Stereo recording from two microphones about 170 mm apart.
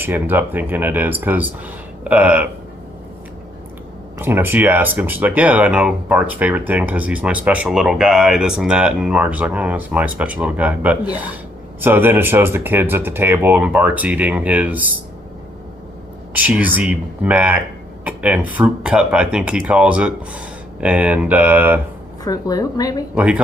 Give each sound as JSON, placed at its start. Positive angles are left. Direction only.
{"t": 0.0, "sound": "speech", "side_deg": -10}
{"t": 4.2, "sound": "speech", "side_deg": -10}
{"t": 16.3, "sound": "speech", "side_deg": -10}
{"t": 22.2, "sound": "a woman's voice", "side_deg": 20}
{"t": 23.1, "sound": "speech", "side_deg": -5}